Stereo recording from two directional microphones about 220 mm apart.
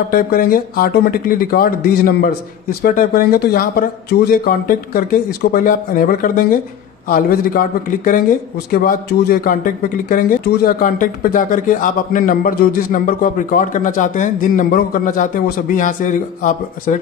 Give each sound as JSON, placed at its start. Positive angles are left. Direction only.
{"t": 0.1, "sound": "speech", "side_deg": 40}